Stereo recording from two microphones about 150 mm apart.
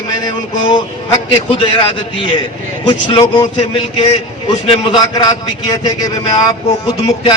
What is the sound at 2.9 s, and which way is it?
Speech, 35° left (ahead or behind).